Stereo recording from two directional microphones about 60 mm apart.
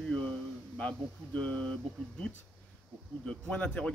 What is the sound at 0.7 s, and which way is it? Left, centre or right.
Speech, left.